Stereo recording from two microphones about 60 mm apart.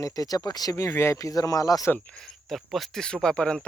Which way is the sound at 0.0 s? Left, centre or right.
Left.